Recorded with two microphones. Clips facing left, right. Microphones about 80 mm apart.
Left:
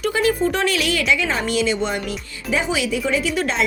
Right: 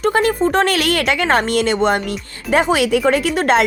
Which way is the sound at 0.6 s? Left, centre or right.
Right.